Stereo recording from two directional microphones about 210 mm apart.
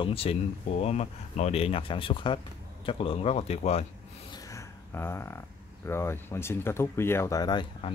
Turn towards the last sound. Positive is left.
turn(degrees=20)  # may be behind; listen again after turning